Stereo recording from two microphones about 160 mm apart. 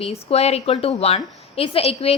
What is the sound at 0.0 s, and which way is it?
A woman's voice, 40° left (ahead or behind).